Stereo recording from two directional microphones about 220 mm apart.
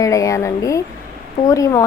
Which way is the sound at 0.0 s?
15° left (ahead or behind).